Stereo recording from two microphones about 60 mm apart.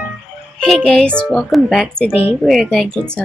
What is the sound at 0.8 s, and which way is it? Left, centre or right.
Speech, centre.